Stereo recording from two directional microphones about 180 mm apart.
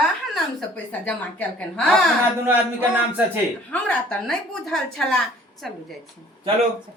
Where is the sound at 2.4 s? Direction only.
10° right (ahead or behind).